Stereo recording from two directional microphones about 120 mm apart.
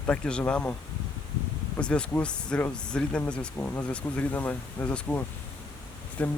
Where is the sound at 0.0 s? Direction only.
10° left (ahead or behind).